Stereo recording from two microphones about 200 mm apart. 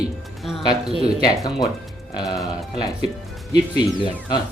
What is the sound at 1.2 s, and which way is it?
Speech, 15° left (ahead or behind).